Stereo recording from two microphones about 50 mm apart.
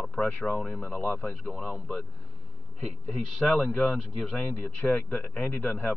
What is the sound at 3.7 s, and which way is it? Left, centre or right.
Speech, left.